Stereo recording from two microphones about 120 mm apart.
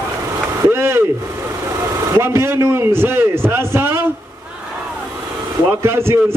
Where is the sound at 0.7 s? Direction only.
20° right (ahead or behind).